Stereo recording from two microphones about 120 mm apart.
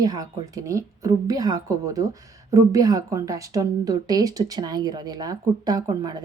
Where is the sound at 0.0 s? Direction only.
30° right (ahead or behind).